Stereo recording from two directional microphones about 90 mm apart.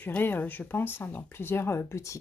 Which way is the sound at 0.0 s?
20° left (ahead or behind).